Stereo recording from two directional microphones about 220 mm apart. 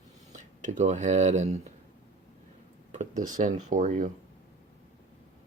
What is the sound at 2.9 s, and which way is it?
Speech, 35° right (ahead or behind).